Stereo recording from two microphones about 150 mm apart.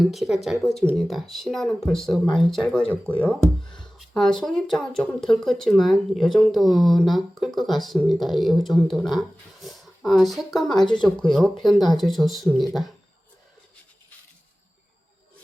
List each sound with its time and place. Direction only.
0.0 s speech: centre (ahead or behind)
10.8 s speech: 30° left (ahead or behind)
11.2 s speech: 5° left (ahead or behind)